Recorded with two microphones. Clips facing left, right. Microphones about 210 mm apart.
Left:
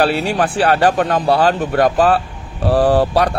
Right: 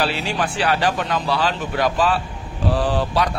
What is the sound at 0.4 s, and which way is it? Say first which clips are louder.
Speech: left 6 dB; 55° left (ahead or behind).